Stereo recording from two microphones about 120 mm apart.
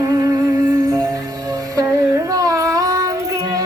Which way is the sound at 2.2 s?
30° right (ahead or behind).